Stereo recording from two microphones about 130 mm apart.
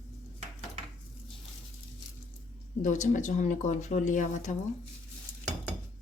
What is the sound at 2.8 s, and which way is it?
Speech, 85° left.